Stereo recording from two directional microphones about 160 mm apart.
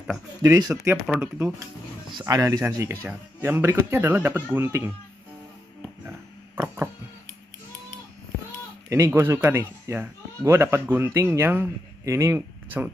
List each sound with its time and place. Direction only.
0.4 s speech: 20° right (ahead or behind)
1.0 s speech: 5° right (ahead or behind)
2.1 s speech: 20° right (ahead or behind)
6.0 s a sound: 15° right (ahead or behind)
8.8 s speech: 15° right (ahead or behind)